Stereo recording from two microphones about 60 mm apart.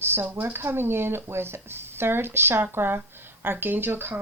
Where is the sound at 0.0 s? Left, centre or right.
Right.